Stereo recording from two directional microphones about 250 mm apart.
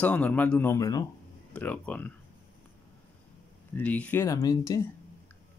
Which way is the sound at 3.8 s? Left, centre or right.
Centre.